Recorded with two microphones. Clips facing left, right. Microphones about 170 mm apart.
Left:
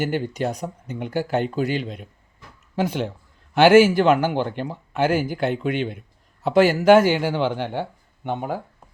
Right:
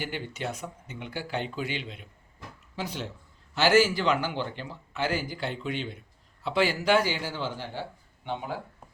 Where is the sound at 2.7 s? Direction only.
55° left (ahead or behind).